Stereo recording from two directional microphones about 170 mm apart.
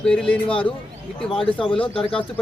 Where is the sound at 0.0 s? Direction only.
5° left (ahead or behind).